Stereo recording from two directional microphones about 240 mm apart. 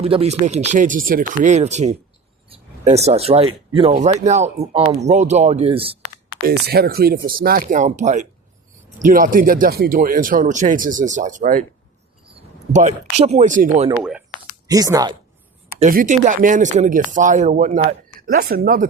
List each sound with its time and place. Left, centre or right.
0.0 s speech: right
6.5 s speech: right
13.9 s speech: centre
14.7 s speech: centre
15.8 s speech: right